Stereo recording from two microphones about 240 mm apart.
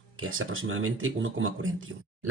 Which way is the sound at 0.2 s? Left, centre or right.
Right.